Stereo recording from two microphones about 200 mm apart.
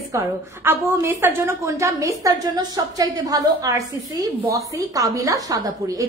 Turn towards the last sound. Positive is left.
turn(degrees=-15)  # may be behind; listen again after turning